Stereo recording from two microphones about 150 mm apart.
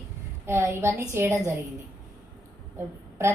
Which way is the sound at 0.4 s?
15° right (ahead or behind).